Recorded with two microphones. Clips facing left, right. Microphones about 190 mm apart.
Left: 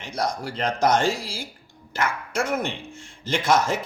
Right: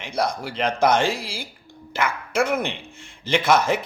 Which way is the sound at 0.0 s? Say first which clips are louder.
Right 2 dB; 60° right (ahead or behind).